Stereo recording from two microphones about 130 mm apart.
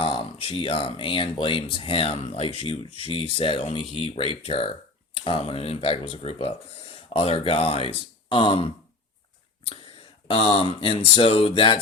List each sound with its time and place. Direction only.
0.0 s speech: 45° left (ahead or behind)
10.2 s speech: 50° left (ahead or behind)